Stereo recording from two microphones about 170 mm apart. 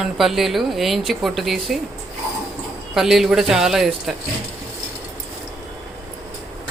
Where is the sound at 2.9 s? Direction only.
Centre (ahead or behind).